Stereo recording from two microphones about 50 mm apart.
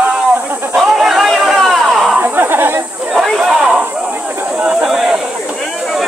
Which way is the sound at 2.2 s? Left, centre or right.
Right.